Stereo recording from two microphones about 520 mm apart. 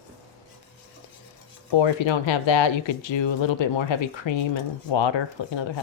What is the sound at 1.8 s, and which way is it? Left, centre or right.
Speech, left.